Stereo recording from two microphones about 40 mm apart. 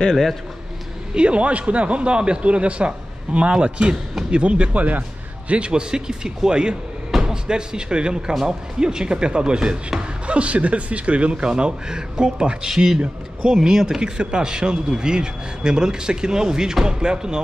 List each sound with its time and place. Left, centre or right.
1.1 s speech: right
5.5 s speech: right
7.1 s a sound: centre
7.4 s a man's voice: right